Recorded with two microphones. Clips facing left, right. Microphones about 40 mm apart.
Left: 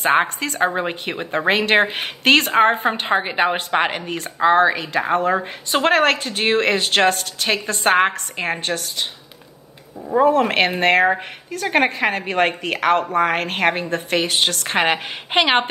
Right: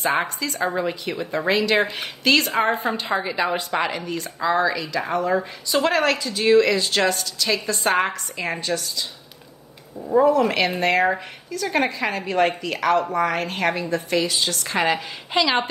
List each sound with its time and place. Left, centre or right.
0.0 s speech: left
10.1 s speech: left